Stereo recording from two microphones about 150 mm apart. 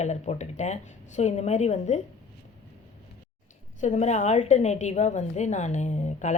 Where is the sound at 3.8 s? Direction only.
50° left (ahead or behind).